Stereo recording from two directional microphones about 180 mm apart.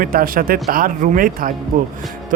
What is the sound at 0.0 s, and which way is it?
Speech, 50° right (ahead or behind).